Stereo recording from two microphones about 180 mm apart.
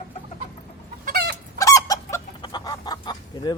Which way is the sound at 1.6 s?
15° left (ahead or behind).